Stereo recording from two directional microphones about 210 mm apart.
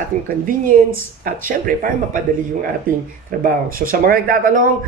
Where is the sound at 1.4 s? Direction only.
40° right (ahead or behind).